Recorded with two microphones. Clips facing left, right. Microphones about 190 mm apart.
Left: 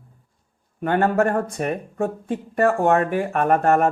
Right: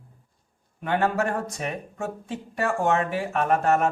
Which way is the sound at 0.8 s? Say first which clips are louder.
Left 5 dB; 50° left (ahead or behind).